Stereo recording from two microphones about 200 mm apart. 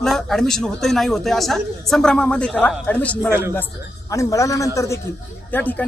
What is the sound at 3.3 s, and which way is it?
Speech, 10° right (ahead or behind).